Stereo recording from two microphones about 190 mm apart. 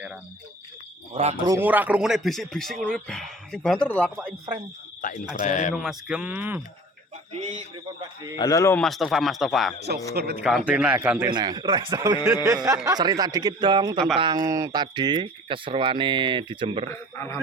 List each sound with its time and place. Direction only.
1.1 s speech: 35° right (ahead or behind)
1.5 s speech: 10° right (ahead or behind); by 4.1 s 5° left (ahead or behind)
5.0 s speech: 45° left (ahead or behind)
5.7 s speech: centre (ahead or behind)
8.4 s a man's voice: 15° left (ahead or behind)
8.8 s speech: centre (ahead or behind)
10.2 s a man's voice: 55° right (ahead or behind)
10.4 s speech: 5° right (ahead or behind)
11.3 s speech: 20° right (ahead or behind)
16.9 s a man's voice: 15° left (ahead or behind)